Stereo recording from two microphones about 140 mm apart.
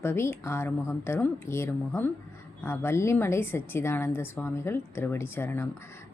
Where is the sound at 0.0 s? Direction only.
15° left (ahead or behind).